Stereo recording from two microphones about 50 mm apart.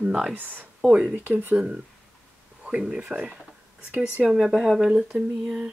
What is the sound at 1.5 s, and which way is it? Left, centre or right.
Speech, centre.